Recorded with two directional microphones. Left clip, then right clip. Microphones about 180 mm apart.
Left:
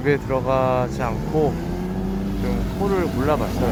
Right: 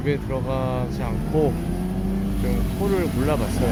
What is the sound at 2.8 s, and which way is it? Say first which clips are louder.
Speech: left 2 dB; 5° right (ahead or behind).